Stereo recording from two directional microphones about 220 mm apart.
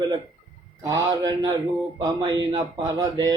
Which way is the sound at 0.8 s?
15° right (ahead or behind).